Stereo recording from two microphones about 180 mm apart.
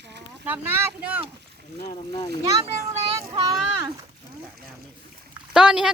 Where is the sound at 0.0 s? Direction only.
70° right (ahead or behind).